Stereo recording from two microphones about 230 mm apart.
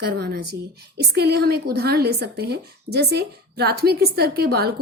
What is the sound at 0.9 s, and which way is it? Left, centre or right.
A woman's voice, right.